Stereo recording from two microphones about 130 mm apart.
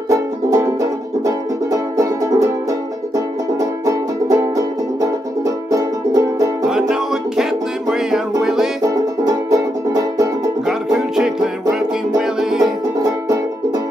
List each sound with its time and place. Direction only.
0.1 s music: 25° right (ahead or behind)
3.5 s music: 25° right (ahead or behind)
6.7 s music: 5° right (ahead or behind)
8.8 s music: 25° right (ahead or behind)
10.7 s music: centre (ahead or behind)